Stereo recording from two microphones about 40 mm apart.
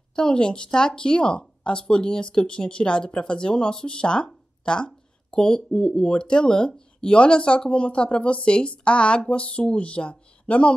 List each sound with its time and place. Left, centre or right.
0.1 s speech: left